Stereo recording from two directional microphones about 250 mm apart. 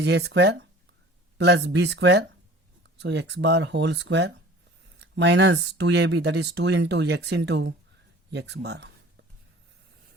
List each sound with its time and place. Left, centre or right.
0.0 s speech: right